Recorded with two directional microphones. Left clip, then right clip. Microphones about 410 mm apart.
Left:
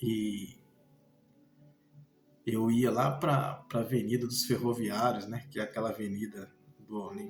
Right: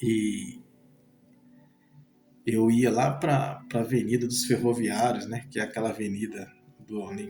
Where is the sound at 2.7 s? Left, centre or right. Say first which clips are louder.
Right 5 dB; left.